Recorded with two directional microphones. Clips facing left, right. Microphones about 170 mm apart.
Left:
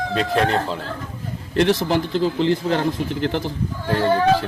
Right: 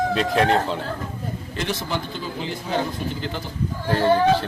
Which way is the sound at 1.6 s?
80° left.